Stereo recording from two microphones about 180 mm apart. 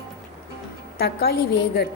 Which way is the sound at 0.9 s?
60° left (ahead or behind).